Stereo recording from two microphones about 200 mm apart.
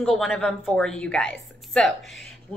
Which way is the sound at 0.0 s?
Centre (ahead or behind).